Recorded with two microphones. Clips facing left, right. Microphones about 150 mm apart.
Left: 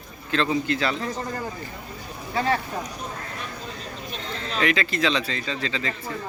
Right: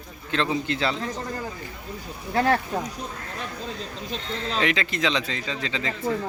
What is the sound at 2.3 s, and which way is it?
Speech, 65° right (ahead or behind).